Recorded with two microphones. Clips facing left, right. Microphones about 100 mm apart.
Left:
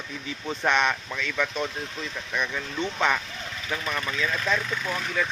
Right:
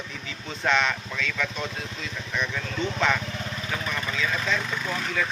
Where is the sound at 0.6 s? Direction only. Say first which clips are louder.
Even; 15° left (ahead or behind).